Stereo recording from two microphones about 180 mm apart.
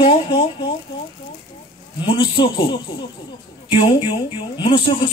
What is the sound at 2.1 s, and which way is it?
Speech, 25° left (ahead or behind).